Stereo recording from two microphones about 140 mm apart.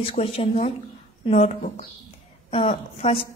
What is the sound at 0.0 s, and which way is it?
Speech, 45° left (ahead or behind).